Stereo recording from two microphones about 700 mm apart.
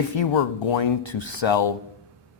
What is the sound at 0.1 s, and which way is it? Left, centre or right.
Speech, left.